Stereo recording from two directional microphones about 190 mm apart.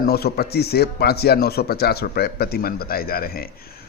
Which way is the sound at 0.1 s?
55° left (ahead or behind).